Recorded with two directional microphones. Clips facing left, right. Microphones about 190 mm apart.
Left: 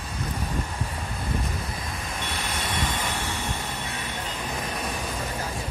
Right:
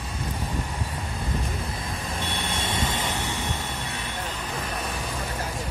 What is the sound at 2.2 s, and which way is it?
Vehicle, 30° right (ahead or behind).